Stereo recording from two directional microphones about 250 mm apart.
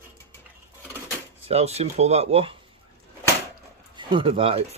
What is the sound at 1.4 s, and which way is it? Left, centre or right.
Speech, right.